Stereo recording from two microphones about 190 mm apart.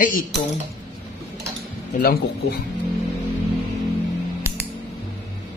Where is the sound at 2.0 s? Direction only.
50° left (ahead or behind).